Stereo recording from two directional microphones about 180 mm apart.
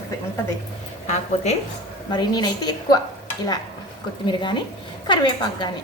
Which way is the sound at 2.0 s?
25° left (ahead or behind).